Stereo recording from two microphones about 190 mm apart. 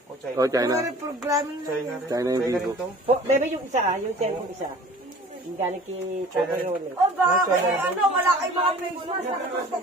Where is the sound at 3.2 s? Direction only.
35° right (ahead or behind).